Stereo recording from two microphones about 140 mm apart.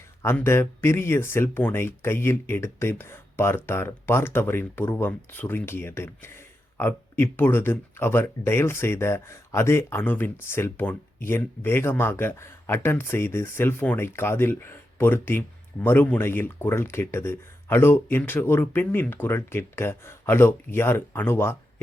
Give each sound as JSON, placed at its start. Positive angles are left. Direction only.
{"t": 0.4, "sound": "speech", "side_deg": 15}